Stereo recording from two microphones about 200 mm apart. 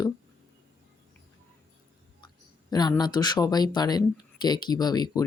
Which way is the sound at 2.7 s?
20° left (ahead or behind).